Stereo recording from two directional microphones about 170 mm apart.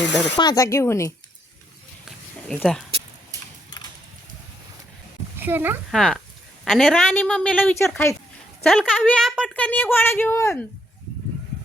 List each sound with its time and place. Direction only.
0.3 s speech: 20° left (ahead or behind)
2.0 s a sound: centre (ahead or behind)
5.4 s speech: 10° right (ahead or behind)
5.9 s a woman's voice: centre (ahead or behind)
7.1 s speech: 10° left (ahead or behind)
8.6 s a woman's voice: centre (ahead or behind)